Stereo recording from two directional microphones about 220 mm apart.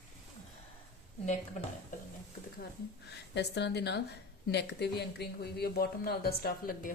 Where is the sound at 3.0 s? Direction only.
50° left (ahead or behind).